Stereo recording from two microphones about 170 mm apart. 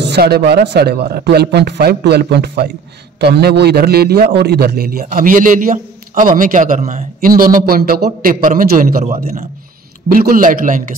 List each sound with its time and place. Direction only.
0.0 s a man's voice: 75° right (ahead or behind); by 10.8 s 50° right (ahead or behind)